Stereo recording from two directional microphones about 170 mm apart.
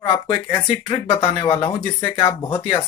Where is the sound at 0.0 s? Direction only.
35° left (ahead or behind).